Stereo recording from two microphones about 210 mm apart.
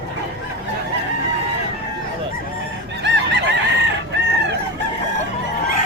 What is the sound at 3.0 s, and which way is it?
Fowl, 55° right (ahead or behind).